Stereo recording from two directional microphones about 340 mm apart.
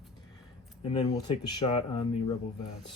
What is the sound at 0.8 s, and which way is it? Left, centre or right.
Speech, centre.